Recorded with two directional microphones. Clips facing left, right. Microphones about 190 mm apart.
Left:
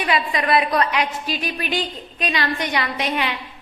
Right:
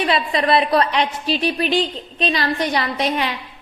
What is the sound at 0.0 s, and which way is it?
A woman's voice, 30° right (ahead or behind).